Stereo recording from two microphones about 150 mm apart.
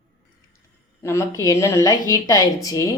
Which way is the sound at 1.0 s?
20° left (ahead or behind).